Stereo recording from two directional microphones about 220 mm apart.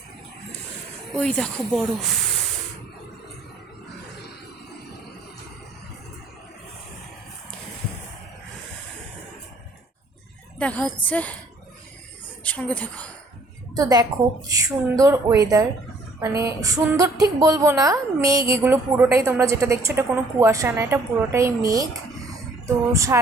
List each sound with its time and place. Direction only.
1.1 s speech: 5° left (ahead or behind)
10.6 s a woman's voice: 5° left (ahead or behind)
12.4 s a woman's voice: 5° left (ahead or behind)
13.7 s a woman's voice: 15° right (ahead or behind)